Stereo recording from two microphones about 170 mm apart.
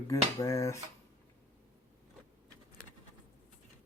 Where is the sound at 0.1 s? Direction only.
20° left (ahead or behind).